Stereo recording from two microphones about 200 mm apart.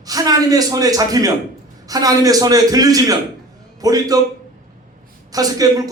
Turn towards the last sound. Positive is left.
turn(degrees=-20)  # may be behind; listen again after turning